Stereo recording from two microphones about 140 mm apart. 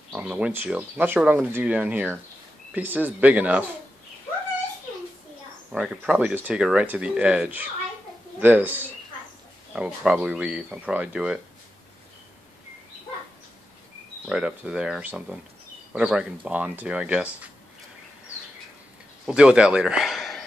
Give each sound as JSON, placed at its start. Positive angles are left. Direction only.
{"t": 0.1, "sound": "speech", "side_deg": -10}
{"t": 5.7, "sound": "speech", "side_deg": -10}
{"t": 14.2, "sound": "speech", "side_deg": -5}
{"t": 19.2, "sound": "a man's voice", "side_deg": -5}